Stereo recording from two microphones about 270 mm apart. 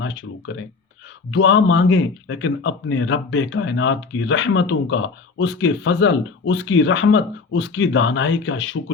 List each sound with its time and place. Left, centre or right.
0.5 s speech: left